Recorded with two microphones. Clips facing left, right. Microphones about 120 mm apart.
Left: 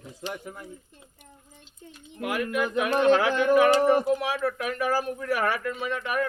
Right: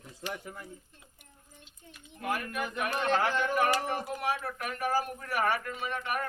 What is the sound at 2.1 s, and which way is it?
Speech, 90° left.